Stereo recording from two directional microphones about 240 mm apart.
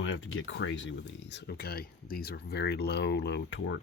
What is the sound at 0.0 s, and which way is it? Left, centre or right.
Speech, left.